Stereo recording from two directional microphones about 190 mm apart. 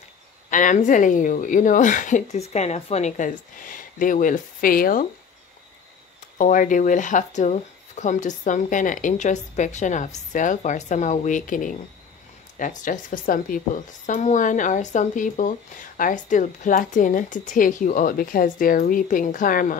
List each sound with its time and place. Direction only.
0.5 s speech: 45° left (ahead or behind)
6.3 s speech: 45° left (ahead or behind)